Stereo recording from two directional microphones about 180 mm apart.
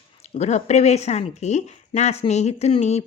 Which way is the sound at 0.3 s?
40° left (ahead or behind).